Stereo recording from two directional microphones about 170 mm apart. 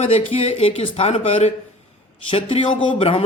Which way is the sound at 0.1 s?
35° left (ahead or behind).